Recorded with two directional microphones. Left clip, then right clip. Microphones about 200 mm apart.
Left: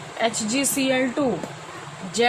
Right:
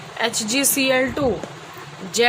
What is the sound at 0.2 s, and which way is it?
Speech, 55° right (ahead or behind).